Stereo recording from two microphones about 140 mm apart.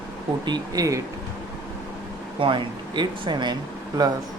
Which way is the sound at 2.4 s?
35° right (ahead or behind).